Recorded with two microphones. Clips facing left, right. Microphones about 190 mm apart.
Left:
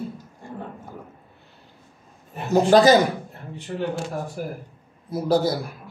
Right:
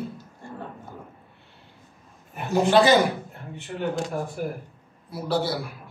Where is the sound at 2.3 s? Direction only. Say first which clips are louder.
Left 3 dB; 40° left (ahead or behind).